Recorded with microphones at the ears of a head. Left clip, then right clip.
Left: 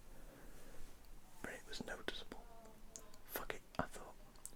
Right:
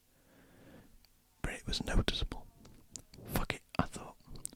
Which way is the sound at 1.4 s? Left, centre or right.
Right.